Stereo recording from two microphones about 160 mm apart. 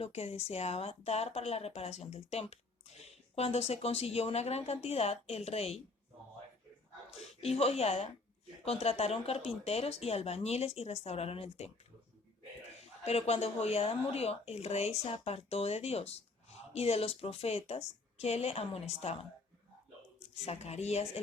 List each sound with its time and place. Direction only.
0.0 s speech: 40° left (ahead or behind)
7.2 s speech: 40° left (ahead or behind)
13.1 s speech: 40° left (ahead or behind)
20.1 s speech: 40° left (ahead or behind)